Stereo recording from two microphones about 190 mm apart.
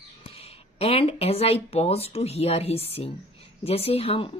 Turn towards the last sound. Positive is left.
turn(degrees=30)  # may be behind; listen again after turning